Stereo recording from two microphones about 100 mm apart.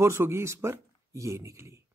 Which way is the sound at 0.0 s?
25° right (ahead or behind).